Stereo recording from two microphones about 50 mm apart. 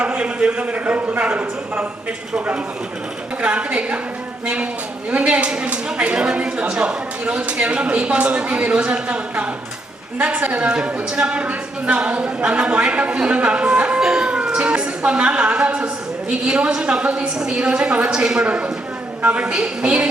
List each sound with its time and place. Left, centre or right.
0.0 s a man's voice: right
3.4 s a woman's voice: right